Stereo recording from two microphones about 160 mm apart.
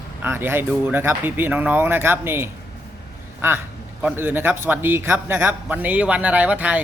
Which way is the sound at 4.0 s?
10° right (ahead or behind).